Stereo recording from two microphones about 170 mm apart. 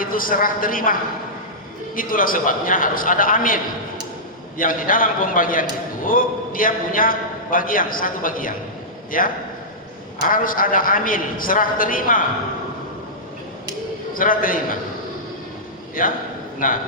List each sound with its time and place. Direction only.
0.0 s a man's voice: 55° left (ahead or behind)
2.0 s a man's voice: 55° left (ahead or behind)
14.1 s a man's voice: 55° left (ahead or behind)
16.0 s a man's voice: 55° left (ahead or behind)